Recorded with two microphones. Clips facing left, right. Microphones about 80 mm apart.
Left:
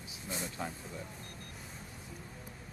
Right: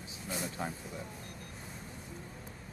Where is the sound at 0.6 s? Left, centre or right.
Centre.